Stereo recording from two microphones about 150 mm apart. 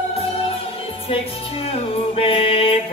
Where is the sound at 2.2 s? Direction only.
40° left (ahead or behind).